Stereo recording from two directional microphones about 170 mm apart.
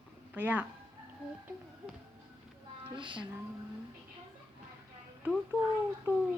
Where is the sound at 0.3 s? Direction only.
10° right (ahead or behind).